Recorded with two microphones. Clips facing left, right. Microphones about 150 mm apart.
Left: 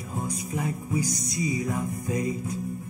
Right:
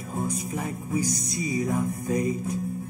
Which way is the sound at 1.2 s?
20° left (ahead or behind).